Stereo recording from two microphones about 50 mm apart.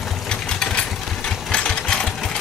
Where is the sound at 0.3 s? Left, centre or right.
Centre.